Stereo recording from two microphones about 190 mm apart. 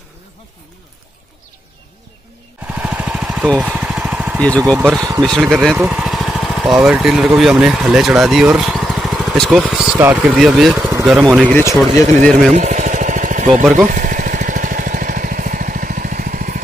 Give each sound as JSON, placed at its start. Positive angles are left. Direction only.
{"t": 2.6, "sound": "vehicle", "side_deg": -5}
{"t": 4.4, "sound": "speech", "side_deg": 5}
{"t": 5.0, "sound": "speech", "side_deg": -20}
{"t": 5.4, "sound": "speech", "side_deg": 0}
{"t": 5.8, "sound": "jackhammer", "side_deg": -5}
{"t": 6.8, "sound": "speech", "side_deg": 0}
{"t": 10.3, "sound": "speech", "side_deg": 0}
{"t": 11.9, "sound": "speech", "side_deg": -40}
{"t": 12.5, "sound": "a sound", "side_deg": -40}
{"t": 13.8, "sound": "vehicle", "side_deg": -45}